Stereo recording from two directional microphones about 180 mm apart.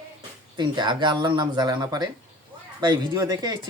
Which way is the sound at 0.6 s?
25° right (ahead or behind).